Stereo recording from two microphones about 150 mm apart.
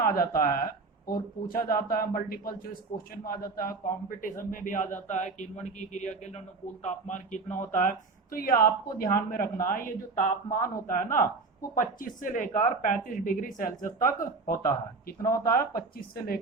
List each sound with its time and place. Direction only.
0.0 s a man's voice: 75° left (ahead or behind)
4.2 s a woman's voice: 60° left (ahead or behind); by 16.4 s 75° left (ahead or behind)